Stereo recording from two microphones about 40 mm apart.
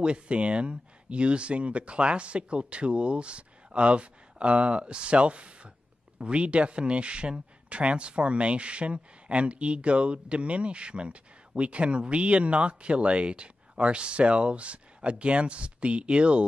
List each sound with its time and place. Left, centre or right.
0.0 s a man's voice: right